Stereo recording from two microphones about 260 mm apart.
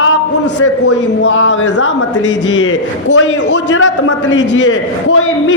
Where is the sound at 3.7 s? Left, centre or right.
Left.